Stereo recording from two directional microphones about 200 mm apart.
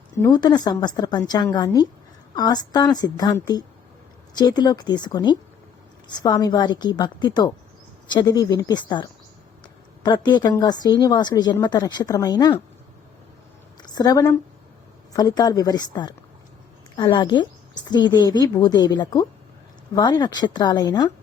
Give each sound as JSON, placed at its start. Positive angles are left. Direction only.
{"t": 0.2, "sound": "a woman's voice", "side_deg": 20}
{"t": 13.8, "sound": "a woman's voice", "side_deg": 20}